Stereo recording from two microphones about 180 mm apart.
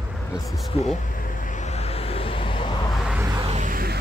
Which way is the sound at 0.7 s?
40° left (ahead or behind).